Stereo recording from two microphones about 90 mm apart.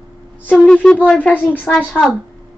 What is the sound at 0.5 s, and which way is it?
A woman's voice, 10° left (ahead or behind).